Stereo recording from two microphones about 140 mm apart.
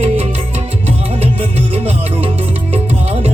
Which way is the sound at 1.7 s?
45° right (ahead or behind).